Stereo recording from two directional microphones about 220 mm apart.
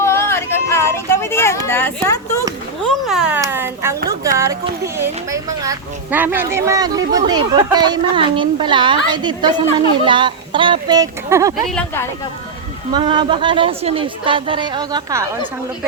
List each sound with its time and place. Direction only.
0.0 s a sound: 10° left (ahead or behind)
1.6 s speech: 10° left (ahead or behind)
2.8 s babbling: centre (ahead or behind)
4.2 s speech: 15° right (ahead or behind)
11.5 s speech: 5° left (ahead or behind)
12.9 s speech: 20° right (ahead or behind)